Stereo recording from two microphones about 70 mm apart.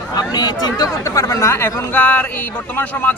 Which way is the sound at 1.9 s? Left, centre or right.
Left.